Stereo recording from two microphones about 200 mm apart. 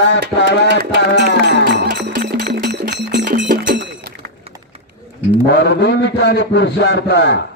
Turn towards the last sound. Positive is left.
turn(degrees=60)  # may be behind; listen again after turning